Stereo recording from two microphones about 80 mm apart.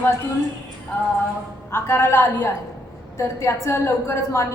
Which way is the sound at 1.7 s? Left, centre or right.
Left.